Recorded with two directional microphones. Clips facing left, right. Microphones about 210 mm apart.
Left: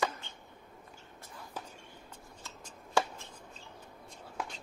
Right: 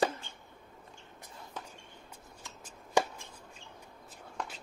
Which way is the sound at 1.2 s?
20° right (ahead or behind).